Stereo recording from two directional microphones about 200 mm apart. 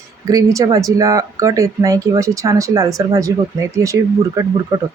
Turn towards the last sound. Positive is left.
turn(degrees=-15)  # may be behind; listen again after turning